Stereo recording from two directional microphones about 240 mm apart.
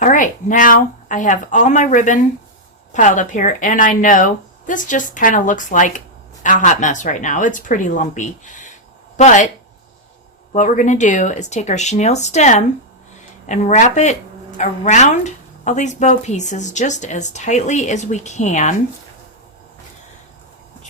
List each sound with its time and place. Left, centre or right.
0.0 s a woman's voice: left
10.5 s speech: left